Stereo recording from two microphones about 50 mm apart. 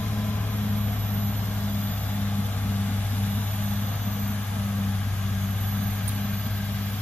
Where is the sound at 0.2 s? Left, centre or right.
Left.